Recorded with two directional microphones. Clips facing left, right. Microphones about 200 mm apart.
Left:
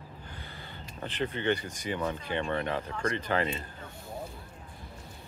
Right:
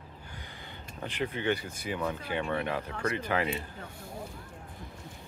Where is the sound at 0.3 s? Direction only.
15° right (ahead or behind).